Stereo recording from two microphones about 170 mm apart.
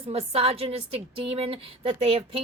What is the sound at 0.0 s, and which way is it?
A woman's voice, 35° right (ahead or behind).